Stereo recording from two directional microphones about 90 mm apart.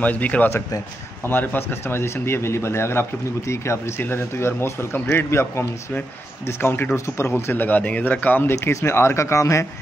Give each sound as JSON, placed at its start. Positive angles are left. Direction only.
{"t": 0.0, "sound": "speech", "side_deg": 15}